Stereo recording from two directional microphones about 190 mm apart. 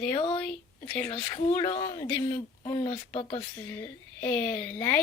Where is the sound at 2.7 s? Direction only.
35° left (ahead or behind).